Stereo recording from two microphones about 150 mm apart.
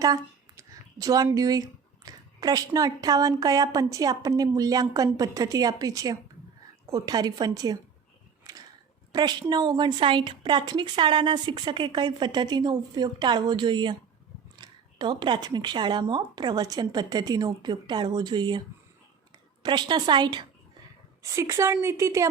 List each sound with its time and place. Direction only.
0.0 s a woman's voice: 25° right (ahead or behind)
8.5 s a sound: 25° right (ahead or behind)
9.1 s a woman's voice: 25° right (ahead or behind)
19.6 s a woman's voice: 30° right (ahead or behind)